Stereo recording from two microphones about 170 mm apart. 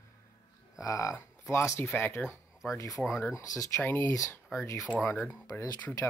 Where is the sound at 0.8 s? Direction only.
20° left (ahead or behind).